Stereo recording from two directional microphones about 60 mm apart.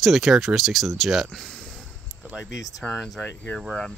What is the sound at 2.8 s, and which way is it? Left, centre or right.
Speech, centre.